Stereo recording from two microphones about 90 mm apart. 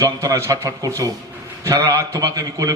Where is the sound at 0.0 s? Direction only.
35° right (ahead or behind).